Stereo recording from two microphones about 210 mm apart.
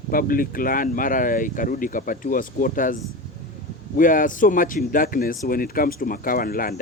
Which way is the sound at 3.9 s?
40° left (ahead or behind).